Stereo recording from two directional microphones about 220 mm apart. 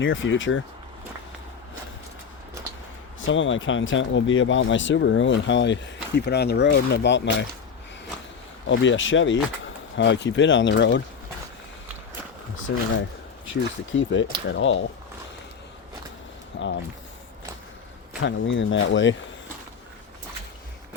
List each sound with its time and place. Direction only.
0.0 s speech: 60° left (ahead or behind)
3.2 s speech: 60° left (ahead or behind)
8.7 s speech: 55° left (ahead or behind)
13.5 s speech: 60° left (ahead or behind)
16.5 s a sound: 60° left (ahead or behind)
18.3 s speech: 60° left (ahead or behind)